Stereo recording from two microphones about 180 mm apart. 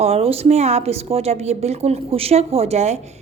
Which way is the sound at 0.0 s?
35° right (ahead or behind).